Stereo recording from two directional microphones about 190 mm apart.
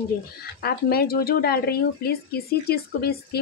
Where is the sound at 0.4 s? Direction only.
55° left (ahead or behind).